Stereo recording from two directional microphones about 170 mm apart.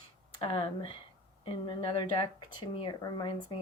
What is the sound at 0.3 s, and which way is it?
Speech, 30° left (ahead or behind).